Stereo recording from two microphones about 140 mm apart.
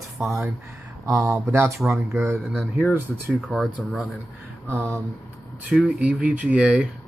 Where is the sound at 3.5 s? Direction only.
Centre (ahead or behind).